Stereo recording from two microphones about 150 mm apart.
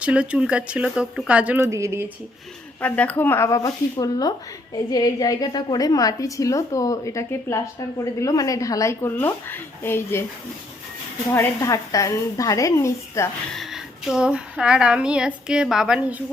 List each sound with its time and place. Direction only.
0.0 s speech: 10° right (ahead or behind)
1.6 s a woman's voice: 20° right (ahead or behind)
2.8 s a woman's voice: 10° left (ahead or behind)
11.3 s a woman's voice: 20° left (ahead or behind)
13.5 s speech: centre (ahead or behind)